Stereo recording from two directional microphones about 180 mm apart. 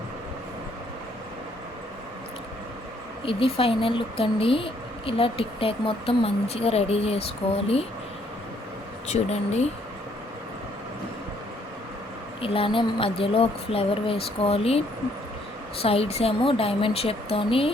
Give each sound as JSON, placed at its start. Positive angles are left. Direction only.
{"t": 3.2, "sound": "speech", "side_deg": 30}
{"t": 9.0, "sound": "speech", "side_deg": 40}
{"t": 12.4, "sound": "speech", "side_deg": 30}